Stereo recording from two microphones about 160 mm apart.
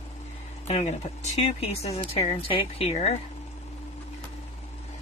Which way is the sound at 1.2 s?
40° left (ahead or behind).